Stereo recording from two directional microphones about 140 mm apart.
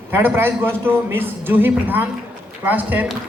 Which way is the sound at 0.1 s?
15° right (ahead or behind).